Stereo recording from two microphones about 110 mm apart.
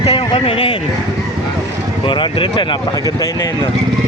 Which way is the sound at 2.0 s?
50° left (ahead or behind).